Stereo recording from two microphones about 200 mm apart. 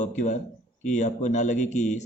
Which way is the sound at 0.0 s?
35° left (ahead or behind).